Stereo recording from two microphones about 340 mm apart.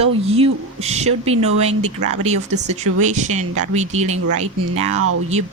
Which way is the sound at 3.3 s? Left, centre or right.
Right.